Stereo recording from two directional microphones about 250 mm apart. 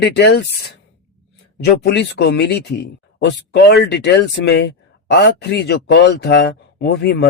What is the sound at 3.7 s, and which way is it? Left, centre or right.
Speech, left.